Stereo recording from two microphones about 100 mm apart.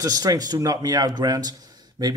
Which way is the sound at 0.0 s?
40° right (ahead or behind).